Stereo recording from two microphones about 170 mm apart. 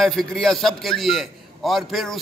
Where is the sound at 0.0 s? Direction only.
Centre (ahead or behind).